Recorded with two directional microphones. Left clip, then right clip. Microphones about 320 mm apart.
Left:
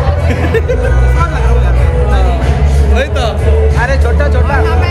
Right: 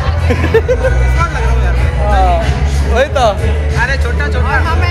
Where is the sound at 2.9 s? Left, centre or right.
Centre.